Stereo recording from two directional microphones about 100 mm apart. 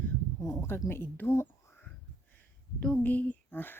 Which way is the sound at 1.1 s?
20° left (ahead or behind).